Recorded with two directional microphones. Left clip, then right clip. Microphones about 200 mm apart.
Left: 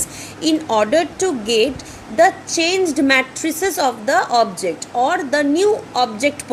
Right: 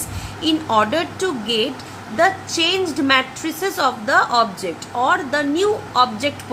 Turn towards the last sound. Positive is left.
turn(degrees=25)  # may be behind; listen again after turning